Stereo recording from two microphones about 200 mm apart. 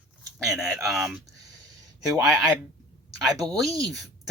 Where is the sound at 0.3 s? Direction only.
15° right (ahead or behind).